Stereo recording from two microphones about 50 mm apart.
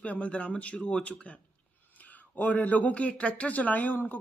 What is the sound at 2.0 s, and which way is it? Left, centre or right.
A man's voice, left.